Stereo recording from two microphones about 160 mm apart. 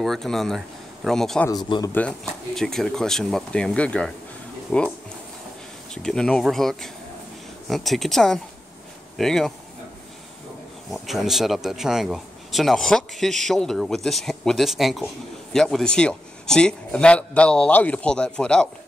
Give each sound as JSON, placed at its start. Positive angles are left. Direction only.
{"t": 0.0, "sound": "speech", "side_deg": 0}
{"t": 1.5, "sound": "speech", "side_deg": 25}
{"t": 1.9, "sound": "speech", "side_deg": 10}
{"t": 6.0, "sound": "speech", "side_deg": 5}
{"t": 10.9, "sound": "speech", "side_deg": 0}